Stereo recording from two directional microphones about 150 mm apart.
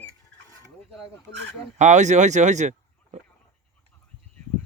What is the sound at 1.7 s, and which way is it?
Speech, 50° right (ahead or behind).